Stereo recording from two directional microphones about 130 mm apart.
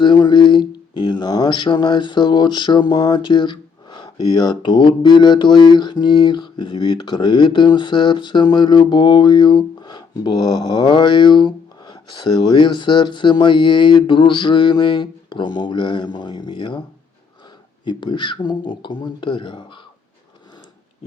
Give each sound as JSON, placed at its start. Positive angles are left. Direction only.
{"t": 0.0, "sound": "speech", "side_deg": 35}
{"t": 17.8, "sound": "speech", "side_deg": 35}